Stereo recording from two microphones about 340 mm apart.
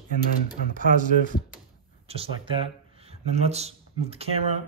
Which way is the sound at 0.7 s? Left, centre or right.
Right.